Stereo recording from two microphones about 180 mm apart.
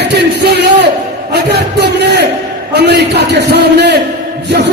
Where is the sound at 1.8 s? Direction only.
75° right (ahead or behind).